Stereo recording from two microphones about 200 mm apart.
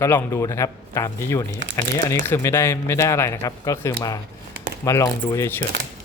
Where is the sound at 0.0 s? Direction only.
15° left (ahead or behind).